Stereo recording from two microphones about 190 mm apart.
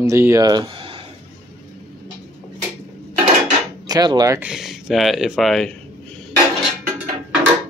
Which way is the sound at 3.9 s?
20° right (ahead or behind).